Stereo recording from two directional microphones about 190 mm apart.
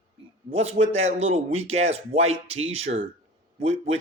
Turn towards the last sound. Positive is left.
turn(degrees=-35)  # may be behind; listen again after turning